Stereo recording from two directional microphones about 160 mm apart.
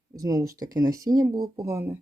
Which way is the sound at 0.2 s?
20° right (ahead or behind).